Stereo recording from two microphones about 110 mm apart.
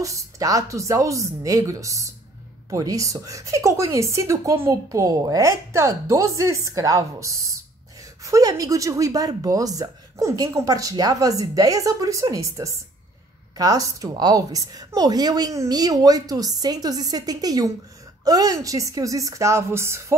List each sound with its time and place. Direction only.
0.0 s a woman's voice: 30° right (ahead or behind)